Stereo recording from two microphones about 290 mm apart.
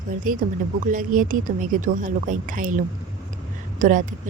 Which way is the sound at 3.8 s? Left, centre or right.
Right.